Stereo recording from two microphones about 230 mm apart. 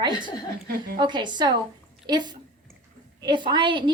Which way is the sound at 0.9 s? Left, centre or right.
Centre.